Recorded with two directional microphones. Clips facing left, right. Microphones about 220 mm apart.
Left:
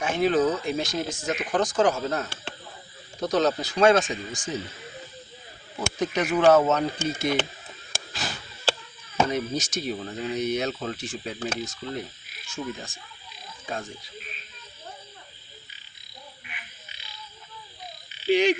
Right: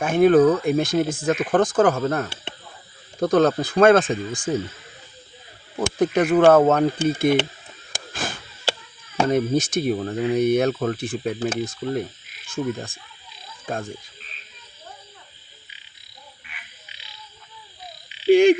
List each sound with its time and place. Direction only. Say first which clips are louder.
0.0 s speech: right 8 dB; 55° right (ahead or behind)
5.7 s speech: right 7 dB; 55° right (ahead or behind)
8.1 s a sound: right 5 dB; 50° right (ahead or behind)
9.3 s speech: right 8 dB; 55° right (ahead or behind)
18.3 s speech: right 8 dB; 50° right (ahead or behind)